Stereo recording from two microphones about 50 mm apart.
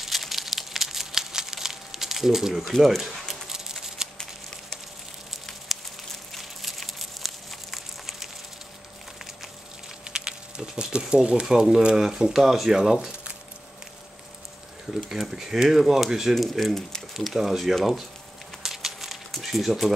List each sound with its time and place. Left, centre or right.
0.0 s crumpling: centre
2.7 s speech: centre
3.0 s a sound: centre
5.3 s a sound: centre
10.0 s a sound: centre
10.8 s speech: centre
11.4 s speech: centre
15.0 s speech: centre
16.5 s speech: centre
17.1 s speech: centre
18.6 s a sound: centre
19.4 s speech: centre